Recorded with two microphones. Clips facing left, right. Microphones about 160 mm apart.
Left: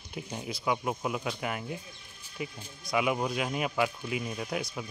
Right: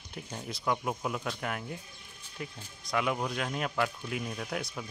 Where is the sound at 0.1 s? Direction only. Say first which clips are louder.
Left 3 dB; 5° left (ahead or behind).